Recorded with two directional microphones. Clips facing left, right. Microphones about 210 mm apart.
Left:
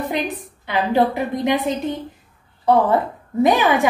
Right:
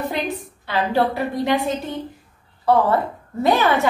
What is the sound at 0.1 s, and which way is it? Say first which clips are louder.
A woman's voice: left 1 dB; 15° left (ahead or behind).